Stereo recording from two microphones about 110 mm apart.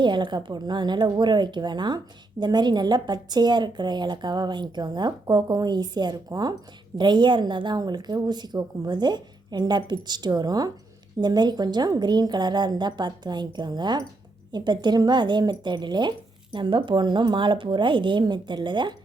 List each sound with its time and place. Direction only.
0.0 s a woman's voice: 45° right (ahead or behind)